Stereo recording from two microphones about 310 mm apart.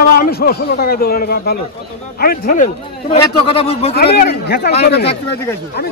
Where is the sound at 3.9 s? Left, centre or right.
Left.